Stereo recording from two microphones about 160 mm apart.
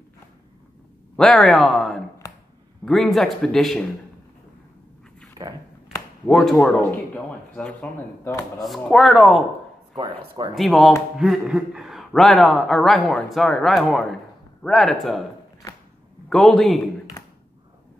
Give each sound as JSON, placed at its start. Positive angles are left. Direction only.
{"t": 1.1, "sound": "a man's voice", "side_deg": 0}
{"t": 6.2, "sound": "a man's voice", "side_deg": 5}
{"t": 9.9, "sound": "speech", "side_deg": -25}
{"t": 10.5, "sound": "a man's voice", "side_deg": 0}
{"t": 16.3, "sound": "a man's voice", "side_deg": 0}